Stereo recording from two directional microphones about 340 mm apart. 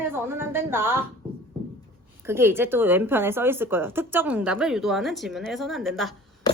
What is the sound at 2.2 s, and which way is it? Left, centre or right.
Speech, centre.